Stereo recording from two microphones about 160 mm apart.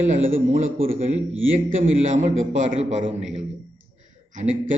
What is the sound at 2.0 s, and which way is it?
A man's voice, 50° right (ahead or behind).